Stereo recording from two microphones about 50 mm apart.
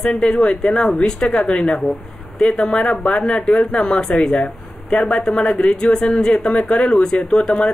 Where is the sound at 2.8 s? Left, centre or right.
Left.